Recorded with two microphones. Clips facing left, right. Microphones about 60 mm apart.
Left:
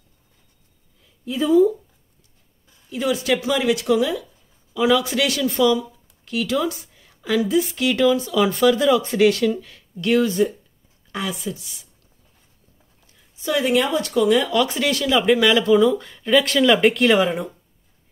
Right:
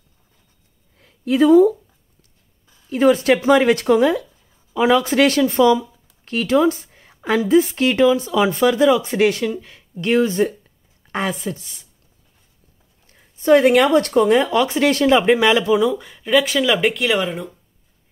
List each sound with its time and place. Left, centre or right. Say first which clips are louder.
0.9 s speech: right 8 dB; right
2.9 s speech: right 7 dB; right
11.1 s speech: right 4 dB; right
13.0 s speech: right 7 dB; right
15.7 s speech: left 1 dB; centre